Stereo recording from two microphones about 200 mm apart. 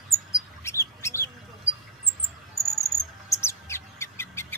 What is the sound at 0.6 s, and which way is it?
Squawk, 15° left (ahead or behind).